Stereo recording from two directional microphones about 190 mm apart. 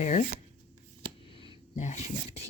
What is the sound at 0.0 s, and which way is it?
Speech, 40° left (ahead or behind).